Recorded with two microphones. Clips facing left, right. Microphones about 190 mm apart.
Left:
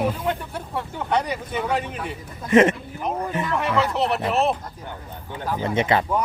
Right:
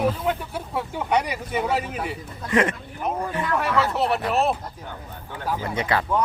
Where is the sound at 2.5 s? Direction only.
25° left (ahead or behind).